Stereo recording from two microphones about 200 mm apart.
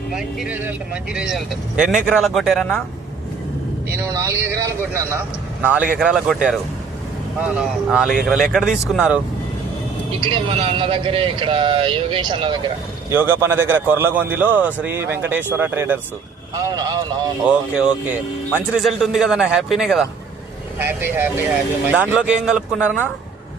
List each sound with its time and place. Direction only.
0.1 s speech: centre (ahead or behind)
3.9 s a man's voice: 15° right (ahead or behind)
10.2 s speech: 25° right (ahead or behind)
13.1 s a man's voice: 10° right (ahead or behind)
17.4 s a man's voice: 5° right (ahead or behind)